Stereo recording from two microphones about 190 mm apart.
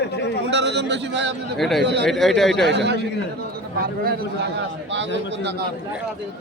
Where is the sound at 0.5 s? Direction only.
65° right (ahead or behind).